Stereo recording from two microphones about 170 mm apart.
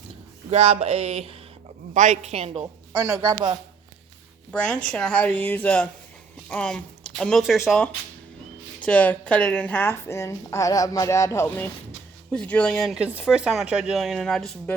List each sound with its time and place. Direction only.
0.5 s a sound: 40° right (ahead or behind)
3.1 s speech: 25° right (ahead or behind)
4.5 s a woman's voice: 5° left (ahead or behind)